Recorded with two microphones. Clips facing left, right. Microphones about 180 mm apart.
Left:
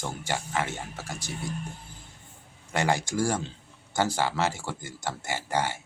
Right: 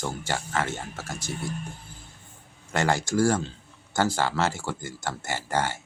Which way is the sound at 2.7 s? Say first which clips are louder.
Right 2 dB; 15° left (ahead or behind).